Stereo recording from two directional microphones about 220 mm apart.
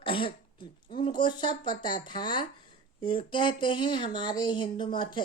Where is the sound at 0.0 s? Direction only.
25° left (ahead or behind).